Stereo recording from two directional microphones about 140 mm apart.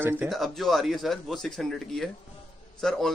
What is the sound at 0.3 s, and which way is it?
Speech, centre (ahead or behind).